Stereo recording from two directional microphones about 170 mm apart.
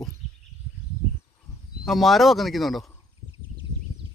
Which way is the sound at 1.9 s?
Centre (ahead or behind).